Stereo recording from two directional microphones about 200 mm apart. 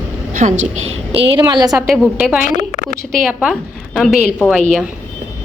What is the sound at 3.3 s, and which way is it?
Speech, 5° right (ahead or behind).